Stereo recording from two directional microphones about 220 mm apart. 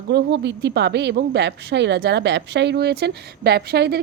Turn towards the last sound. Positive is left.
turn(degrees=-50)  # may be behind; listen again after turning